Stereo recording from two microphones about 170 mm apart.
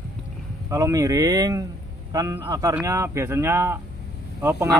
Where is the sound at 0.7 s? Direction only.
20° right (ahead or behind).